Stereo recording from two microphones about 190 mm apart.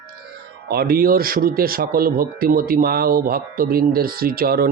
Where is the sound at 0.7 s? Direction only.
55° right (ahead or behind).